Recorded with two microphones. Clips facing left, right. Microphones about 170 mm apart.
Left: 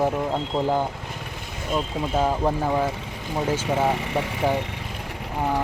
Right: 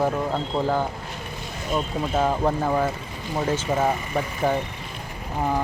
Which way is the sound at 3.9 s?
80° left.